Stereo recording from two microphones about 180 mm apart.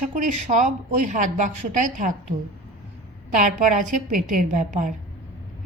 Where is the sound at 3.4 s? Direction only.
45° right (ahead or behind).